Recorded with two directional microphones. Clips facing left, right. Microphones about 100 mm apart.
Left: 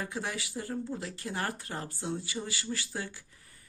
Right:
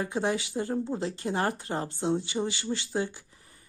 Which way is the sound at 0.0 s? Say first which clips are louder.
Right 8 dB; 25° right (ahead or behind).